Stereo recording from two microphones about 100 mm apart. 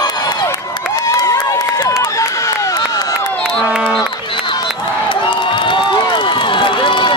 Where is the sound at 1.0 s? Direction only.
35° left (ahead or behind).